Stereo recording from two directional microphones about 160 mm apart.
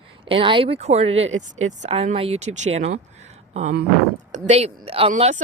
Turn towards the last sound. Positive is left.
turn(degrees=-50)  # may be behind; listen again after turning